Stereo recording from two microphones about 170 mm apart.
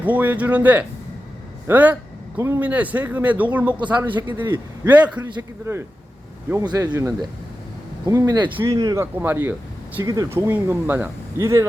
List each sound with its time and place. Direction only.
0.0 s speech: 10° right (ahead or behind)
8.0 s speech: 20° right (ahead or behind)